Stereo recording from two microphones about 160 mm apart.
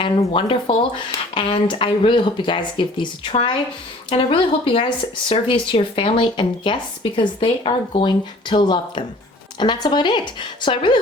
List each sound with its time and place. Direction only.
0.3 s speech: 35° left (ahead or behind)